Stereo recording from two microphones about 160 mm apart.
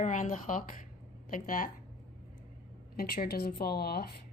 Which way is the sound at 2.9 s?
70° left (ahead or behind).